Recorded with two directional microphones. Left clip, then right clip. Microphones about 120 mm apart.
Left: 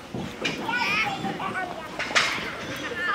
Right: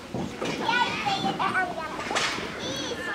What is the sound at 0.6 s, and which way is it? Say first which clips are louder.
Children playing: even; 45° right (ahead or behind).